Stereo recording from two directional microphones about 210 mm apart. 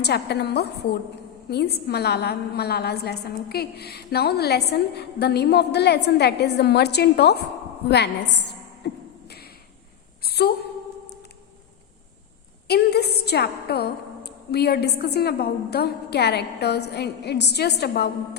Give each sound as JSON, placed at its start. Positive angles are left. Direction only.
{"t": 0.0, "sound": "a woman's voice", "side_deg": 50}
{"t": 7.9, "sound": "a sound", "side_deg": 55}
{"t": 12.6, "sound": "a woman's voice", "side_deg": 50}